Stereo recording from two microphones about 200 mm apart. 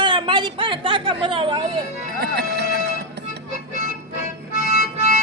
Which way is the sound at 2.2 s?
50° right (ahead or behind).